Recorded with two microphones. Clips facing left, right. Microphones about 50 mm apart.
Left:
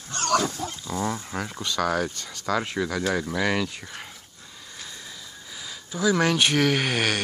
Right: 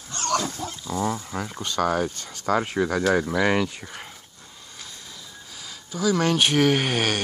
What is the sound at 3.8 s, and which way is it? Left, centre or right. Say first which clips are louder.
Speech: right 1 dB; centre.